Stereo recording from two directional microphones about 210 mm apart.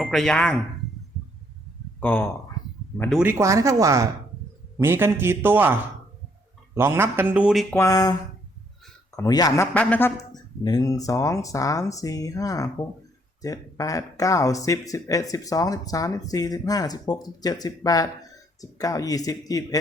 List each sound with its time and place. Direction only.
0.0 s speech: centre (ahead or behind)
2.0 s speech: 10° left (ahead or behind)
3.2 s speech: 15° right (ahead or behind)
6.7 s speech: 10° right (ahead or behind)
7.8 s speech: 15° left (ahead or behind)
9.1 s speech: 15° left (ahead or behind)